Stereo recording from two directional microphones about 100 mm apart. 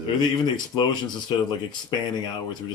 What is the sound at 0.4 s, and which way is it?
Speech, 45° left (ahead or behind).